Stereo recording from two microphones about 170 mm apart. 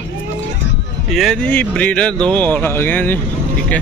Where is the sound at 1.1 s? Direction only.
Centre (ahead or behind).